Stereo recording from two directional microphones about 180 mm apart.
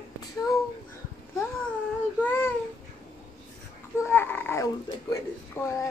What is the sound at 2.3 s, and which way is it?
Babbling, 10° left (ahead or behind).